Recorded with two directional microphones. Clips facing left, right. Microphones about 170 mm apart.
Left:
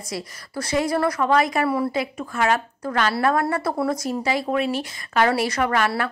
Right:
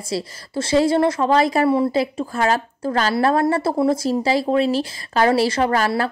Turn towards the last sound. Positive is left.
turn(degrees=-30)  # may be behind; listen again after turning